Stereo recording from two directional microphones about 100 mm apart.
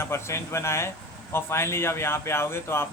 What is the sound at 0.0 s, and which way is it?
Speech, 25° left (ahead or behind).